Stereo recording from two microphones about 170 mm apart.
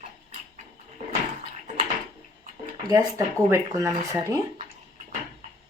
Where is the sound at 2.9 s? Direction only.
20° right (ahead or behind).